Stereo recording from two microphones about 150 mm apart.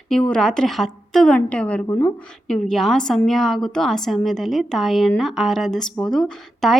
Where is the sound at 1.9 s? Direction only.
20° left (ahead or behind).